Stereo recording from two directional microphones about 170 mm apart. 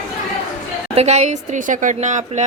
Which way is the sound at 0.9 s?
40° right (ahead or behind).